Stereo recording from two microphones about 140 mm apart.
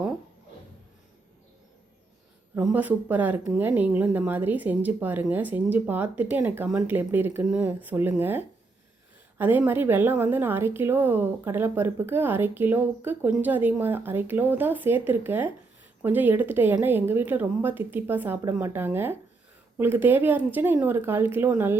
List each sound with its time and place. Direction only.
2.6 s a woman's voice: 10° right (ahead or behind)